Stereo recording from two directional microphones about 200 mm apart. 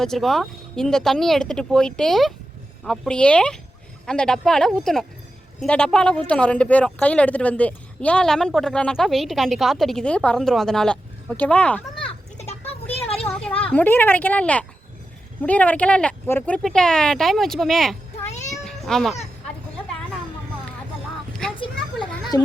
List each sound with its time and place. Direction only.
0.0 s speech: centre (ahead or behind)
12.0 s children playing: 30° left (ahead or behind)
13.2 s a sound: 5° left (ahead or behind)
13.6 s speech: 10° left (ahead or behind)
18.3 s cat: 35° left (ahead or behind)
18.6 s children playing: centre (ahead or behind)
21.4 s children playing: 5° left (ahead or behind)
22.3 s a child's voice: 15° left (ahead or behind)